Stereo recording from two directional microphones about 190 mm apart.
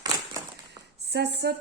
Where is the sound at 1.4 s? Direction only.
60° right (ahead or behind).